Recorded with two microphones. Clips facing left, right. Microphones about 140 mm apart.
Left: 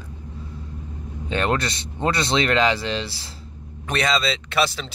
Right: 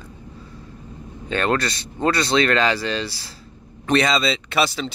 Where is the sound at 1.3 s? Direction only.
20° left (ahead or behind).